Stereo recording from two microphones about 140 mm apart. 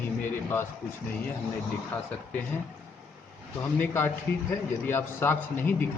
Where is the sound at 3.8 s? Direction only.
15° left (ahead or behind).